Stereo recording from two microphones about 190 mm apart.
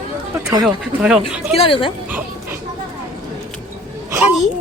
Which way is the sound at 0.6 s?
Centre (ahead or behind).